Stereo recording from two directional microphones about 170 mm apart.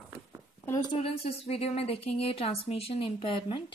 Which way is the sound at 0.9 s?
35° left (ahead or behind).